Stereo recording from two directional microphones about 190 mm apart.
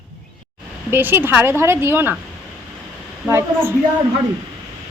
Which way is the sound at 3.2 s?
15° right (ahead or behind).